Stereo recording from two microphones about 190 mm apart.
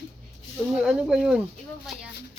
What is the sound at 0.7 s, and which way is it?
Speech, 5° right (ahead or behind).